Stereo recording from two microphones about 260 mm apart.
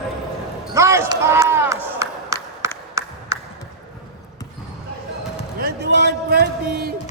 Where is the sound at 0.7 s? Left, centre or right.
Centre.